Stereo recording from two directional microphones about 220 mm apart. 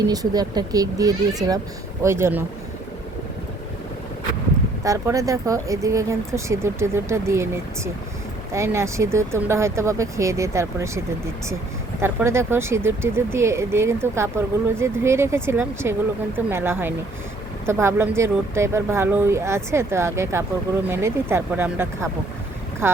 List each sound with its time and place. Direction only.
0.0 s speech: 15° right (ahead or behind)
4.8 s speech: 15° right (ahead or behind)
8.5 s speech: 10° right (ahead or behind)